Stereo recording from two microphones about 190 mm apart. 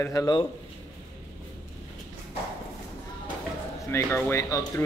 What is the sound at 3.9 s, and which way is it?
Speech, 15° left (ahead or behind).